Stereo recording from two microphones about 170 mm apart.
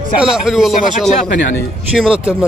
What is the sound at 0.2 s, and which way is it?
A man's voice, 5° right (ahead or behind).